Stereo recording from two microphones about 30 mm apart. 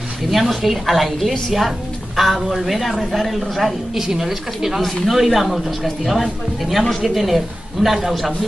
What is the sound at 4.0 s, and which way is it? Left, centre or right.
A woman's voice, centre.